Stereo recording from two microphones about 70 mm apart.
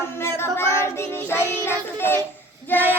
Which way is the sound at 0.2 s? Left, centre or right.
Left.